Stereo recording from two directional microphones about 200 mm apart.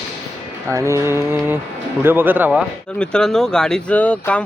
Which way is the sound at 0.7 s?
15° right (ahead or behind).